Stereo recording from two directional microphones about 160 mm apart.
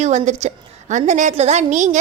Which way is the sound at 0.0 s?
45° right (ahead or behind).